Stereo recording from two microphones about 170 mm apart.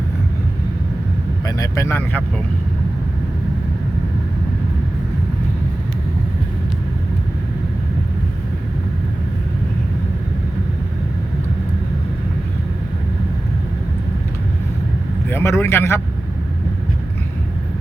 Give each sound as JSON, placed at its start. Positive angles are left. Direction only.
{"t": 1.5, "sound": "speech", "side_deg": 20}
{"t": 15.3, "sound": "speech", "side_deg": 15}